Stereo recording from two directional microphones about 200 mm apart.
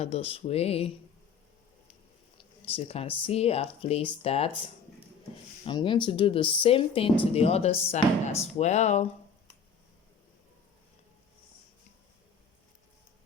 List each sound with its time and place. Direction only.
0.0 s speech: 30° left (ahead or behind)
2.6 s speech: 30° left (ahead or behind)
5.6 s speech: 25° left (ahead or behind)